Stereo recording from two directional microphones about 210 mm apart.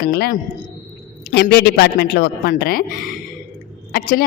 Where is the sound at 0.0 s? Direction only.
50° left (ahead or behind).